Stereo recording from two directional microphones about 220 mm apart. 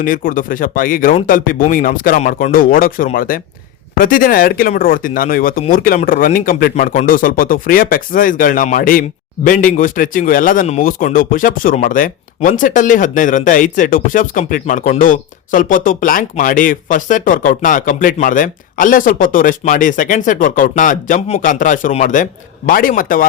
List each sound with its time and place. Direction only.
0.0 s speech: 40° left (ahead or behind)